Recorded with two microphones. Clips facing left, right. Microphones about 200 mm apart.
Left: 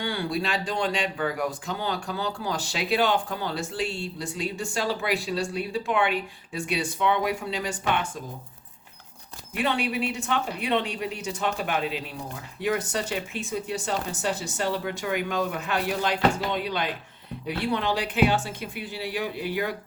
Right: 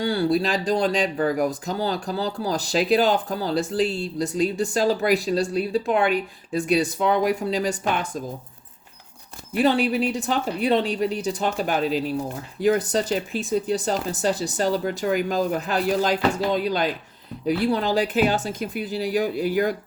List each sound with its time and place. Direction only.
0.0 s speech: 35° right (ahead or behind)
9.6 s speech: 35° right (ahead or behind)